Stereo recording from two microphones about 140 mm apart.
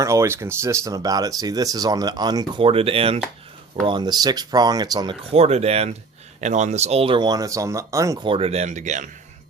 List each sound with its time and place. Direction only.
0.0 s speech: 20° right (ahead or behind); by 3.2 s 45° right (ahead or behind)
3.8 s speech: 30° right (ahead or behind)
5.3 s speech: 50° right (ahead or behind); by 8.2 s 20° right (ahead or behind)
8.2 s speech: 40° right (ahead or behind); by 9.0 s 60° right (ahead or behind)